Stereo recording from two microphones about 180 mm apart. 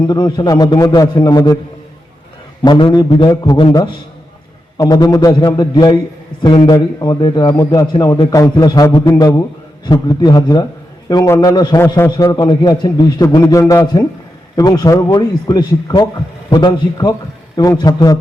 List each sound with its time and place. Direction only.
0.1 s a man's voice: 25° left (ahead or behind)
2.6 s a man's voice: 25° left (ahead or behind)